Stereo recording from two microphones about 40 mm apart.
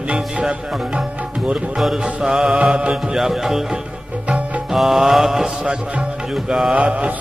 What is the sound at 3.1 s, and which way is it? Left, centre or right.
Music, centre.